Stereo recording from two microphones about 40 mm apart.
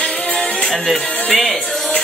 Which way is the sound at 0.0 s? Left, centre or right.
Left.